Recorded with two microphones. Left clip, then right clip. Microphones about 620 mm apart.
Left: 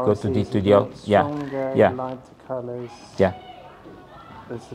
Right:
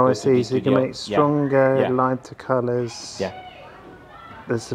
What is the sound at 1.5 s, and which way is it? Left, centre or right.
Speech, right.